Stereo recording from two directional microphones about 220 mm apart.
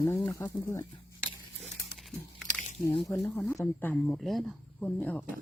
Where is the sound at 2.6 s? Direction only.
30° left (ahead or behind).